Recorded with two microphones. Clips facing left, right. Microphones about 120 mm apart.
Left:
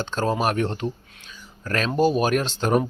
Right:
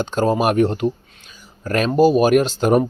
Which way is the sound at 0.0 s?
15° right (ahead or behind).